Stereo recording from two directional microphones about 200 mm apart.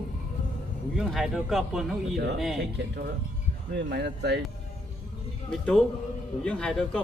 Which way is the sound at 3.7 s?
55° right (ahead or behind).